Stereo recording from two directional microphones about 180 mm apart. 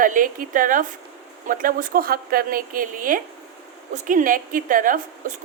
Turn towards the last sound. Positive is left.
turn(degrees=-50)  # may be behind; listen again after turning